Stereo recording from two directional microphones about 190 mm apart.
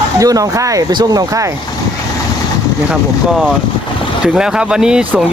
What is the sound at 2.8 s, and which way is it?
Speech, 5° right (ahead or behind).